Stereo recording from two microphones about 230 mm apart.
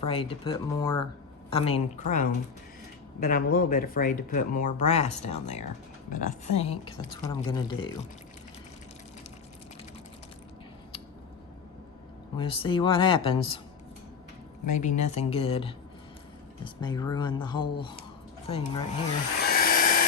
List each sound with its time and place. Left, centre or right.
0.0 s speech: left
12.4 s speech: left
14.7 s speech: left
19.4 s dental drill: left